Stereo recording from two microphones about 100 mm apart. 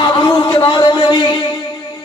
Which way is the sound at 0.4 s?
55° left (ahead or behind).